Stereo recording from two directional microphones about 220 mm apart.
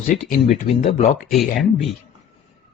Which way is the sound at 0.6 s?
30° left (ahead or behind).